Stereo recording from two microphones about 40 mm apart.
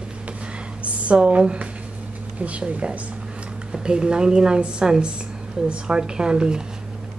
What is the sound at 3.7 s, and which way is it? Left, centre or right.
A woman's voice, right.